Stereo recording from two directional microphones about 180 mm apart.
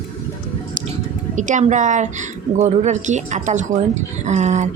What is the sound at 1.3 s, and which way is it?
A woman's voice, 40° right (ahead or behind).